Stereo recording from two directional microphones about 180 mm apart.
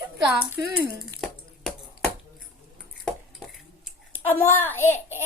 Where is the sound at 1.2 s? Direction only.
5° left (ahead or behind).